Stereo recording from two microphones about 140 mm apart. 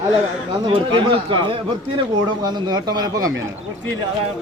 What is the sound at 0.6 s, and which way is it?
A man's voice, 40° right (ahead or behind).